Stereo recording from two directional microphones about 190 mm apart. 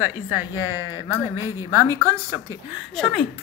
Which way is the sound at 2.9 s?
Centre (ahead or behind).